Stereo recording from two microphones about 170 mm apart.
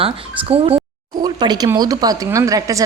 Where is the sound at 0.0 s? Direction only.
35° right (ahead or behind).